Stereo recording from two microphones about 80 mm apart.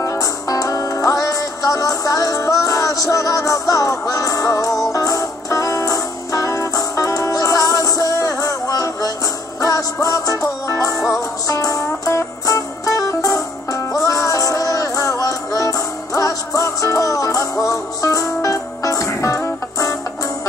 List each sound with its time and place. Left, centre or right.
0.0 s music: left
11.0 s music: centre
11.4 s music: left